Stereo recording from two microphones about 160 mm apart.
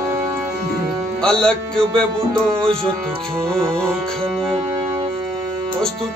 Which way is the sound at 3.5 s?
15° right (ahead or behind).